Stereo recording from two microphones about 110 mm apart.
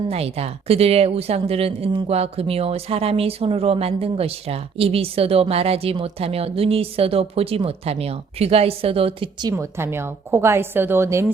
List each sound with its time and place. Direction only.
0.1 s speech: 70° right (ahead or behind)
9.4 s a woman's voice: 30° right (ahead or behind)